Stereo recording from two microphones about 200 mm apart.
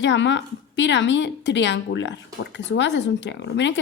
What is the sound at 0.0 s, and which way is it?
A woman's voice, 65° left (ahead or behind).